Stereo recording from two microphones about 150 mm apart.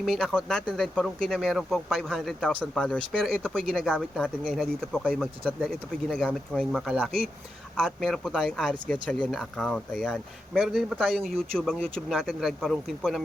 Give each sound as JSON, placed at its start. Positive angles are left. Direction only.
{"t": 0.0, "sound": "speech", "side_deg": 0}